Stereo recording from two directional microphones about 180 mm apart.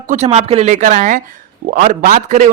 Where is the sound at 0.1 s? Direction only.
40° right (ahead or behind).